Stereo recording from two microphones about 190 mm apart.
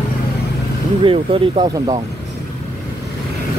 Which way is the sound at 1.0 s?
30° right (ahead or behind).